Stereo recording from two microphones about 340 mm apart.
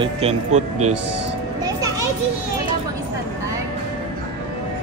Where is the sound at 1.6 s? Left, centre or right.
Centre.